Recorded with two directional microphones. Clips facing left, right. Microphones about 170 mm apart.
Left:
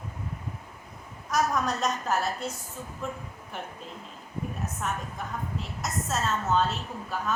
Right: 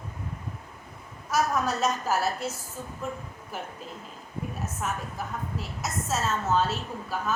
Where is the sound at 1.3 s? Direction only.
5° right (ahead or behind).